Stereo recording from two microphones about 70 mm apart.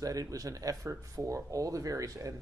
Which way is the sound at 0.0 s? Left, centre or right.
Right.